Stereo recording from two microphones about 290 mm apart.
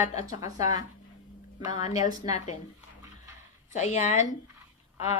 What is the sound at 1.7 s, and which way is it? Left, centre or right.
Speech, left.